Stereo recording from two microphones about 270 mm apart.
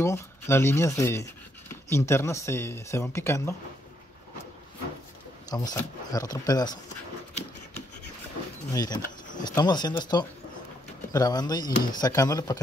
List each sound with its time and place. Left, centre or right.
0.0 s speech: centre
5.5 s speech: centre
8.7 s speech: centre